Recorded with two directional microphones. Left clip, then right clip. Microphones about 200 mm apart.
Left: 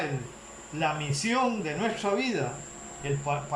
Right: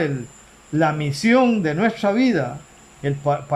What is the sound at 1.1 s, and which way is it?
Speech, 40° right (ahead or behind).